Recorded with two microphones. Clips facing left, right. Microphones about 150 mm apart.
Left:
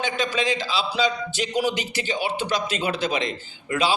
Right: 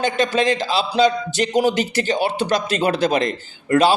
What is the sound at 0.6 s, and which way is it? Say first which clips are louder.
A man's voice: right 7 dB; 45° right (ahead or behind).